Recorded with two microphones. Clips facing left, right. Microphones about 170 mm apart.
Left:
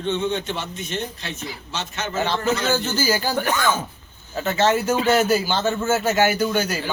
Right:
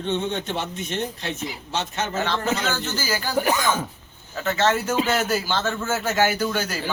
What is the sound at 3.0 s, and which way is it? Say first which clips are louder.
Speech: left 5 dB; 30° left (ahead or behind).